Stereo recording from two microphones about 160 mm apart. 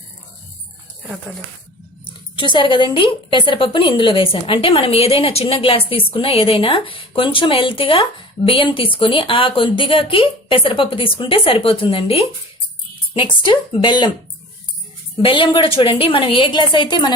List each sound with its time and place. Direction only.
2.4 s a woman's voice: 30° left (ahead or behind)
15.2 s a woman's voice: 30° left (ahead or behind)